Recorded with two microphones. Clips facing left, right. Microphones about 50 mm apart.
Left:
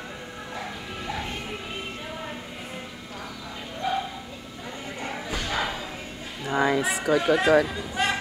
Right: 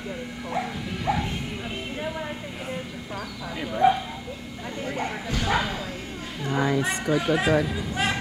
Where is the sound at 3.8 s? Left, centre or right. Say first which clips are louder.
Right 8 dB; right.